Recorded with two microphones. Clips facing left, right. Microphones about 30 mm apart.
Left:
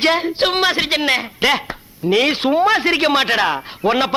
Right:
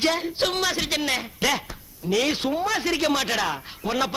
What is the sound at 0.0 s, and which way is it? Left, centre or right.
Speech, left.